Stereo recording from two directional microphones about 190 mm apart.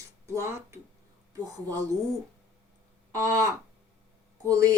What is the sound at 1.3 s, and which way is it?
Speech, 20° right (ahead or behind).